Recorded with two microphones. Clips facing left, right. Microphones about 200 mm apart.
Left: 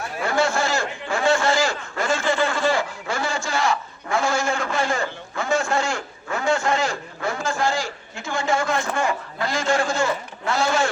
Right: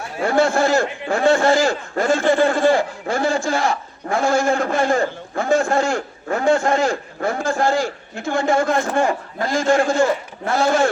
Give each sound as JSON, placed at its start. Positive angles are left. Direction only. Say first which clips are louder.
{"t": 0.3, "sound": "a man's voice", "louder": "right 6 dB", "side_deg": -55}